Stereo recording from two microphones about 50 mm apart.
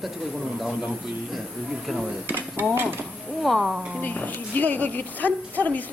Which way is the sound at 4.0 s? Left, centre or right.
Left.